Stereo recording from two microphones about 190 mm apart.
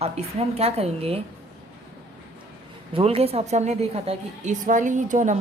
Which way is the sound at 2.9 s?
30° right (ahead or behind).